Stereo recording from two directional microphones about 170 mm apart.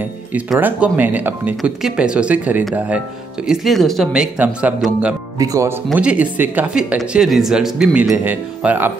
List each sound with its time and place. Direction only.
0.3 s speech: 10° right (ahead or behind)
5.4 s speech: 20° right (ahead or behind)
5.9 s speech: 5° right (ahead or behind)